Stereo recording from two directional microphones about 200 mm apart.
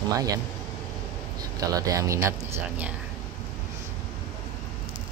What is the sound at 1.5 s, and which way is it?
Speech, 15° right (ahead or behind).